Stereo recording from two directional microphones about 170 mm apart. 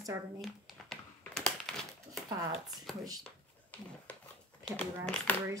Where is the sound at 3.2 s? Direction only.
10° left (ahead or behind).